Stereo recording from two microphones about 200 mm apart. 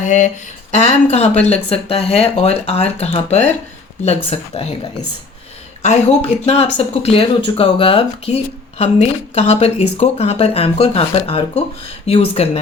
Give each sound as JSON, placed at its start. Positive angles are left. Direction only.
{"t": 0.0, "sound": "a sound", "side_deg": 40}
{"t": 0.9, "sound": "speech", "side_deg": 35}
{"t": 5.8, "sound": "speech", "side_deg": 35}